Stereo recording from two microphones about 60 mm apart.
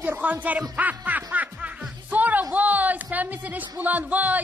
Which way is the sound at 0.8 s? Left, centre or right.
Right.